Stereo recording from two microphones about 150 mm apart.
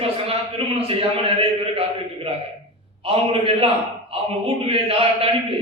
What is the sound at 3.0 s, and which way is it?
A man's voice, 40° right (ahead or behind).